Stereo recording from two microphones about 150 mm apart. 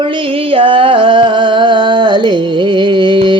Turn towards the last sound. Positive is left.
turn(degrees=-30)  # may be behind; listen again after turning